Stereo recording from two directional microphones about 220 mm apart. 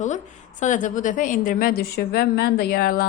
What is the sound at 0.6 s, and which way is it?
A woman's voice, 35° left (ahead or behind).